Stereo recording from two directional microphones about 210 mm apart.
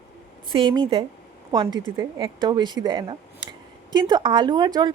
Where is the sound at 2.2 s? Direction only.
20° right (ahead or behind).